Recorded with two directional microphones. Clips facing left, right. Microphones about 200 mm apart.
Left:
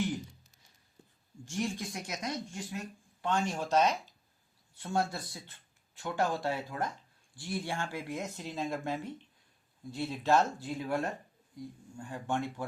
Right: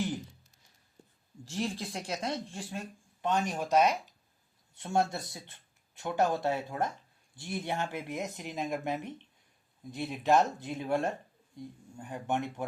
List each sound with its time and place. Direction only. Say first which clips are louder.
1.5 s speech: even; 35° right (ahead or behind)
3.2 s speech: right 1 dB; 20° right (ahead or behind)
4.7 s speech: right 3 dB; 25° right (ahead or behind)